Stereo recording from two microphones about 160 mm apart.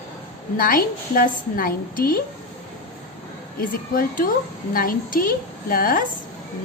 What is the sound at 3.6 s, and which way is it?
A woman's voice, 60° left (ahead or behind).